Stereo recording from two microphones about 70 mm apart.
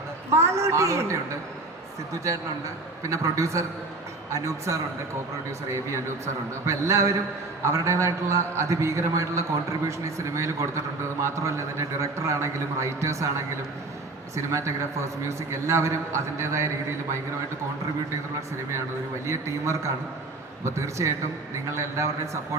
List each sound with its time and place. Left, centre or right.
0.3 s a man's voice: right
3.0 s a man's voice: right
6.2 s a man's voice: right
14.3 s a man's voice: right
19.3 s a man's voice: right